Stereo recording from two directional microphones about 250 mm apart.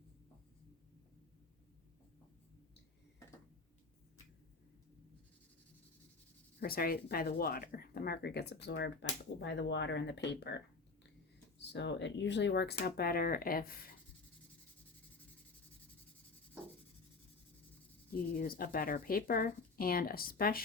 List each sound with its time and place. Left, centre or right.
6.6 s speech: left
11.6 s speech: left
18.1 s speech: left